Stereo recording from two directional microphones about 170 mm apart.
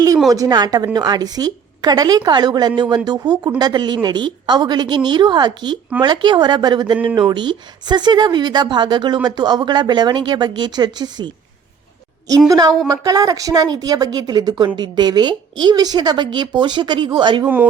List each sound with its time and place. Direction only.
0.3 s a woman's voice: 20° right (ahead or behind)
12.5 s a woman's voice: 20° right (ahead or behind)
17.4 s speech: 10° right (ahead or behind)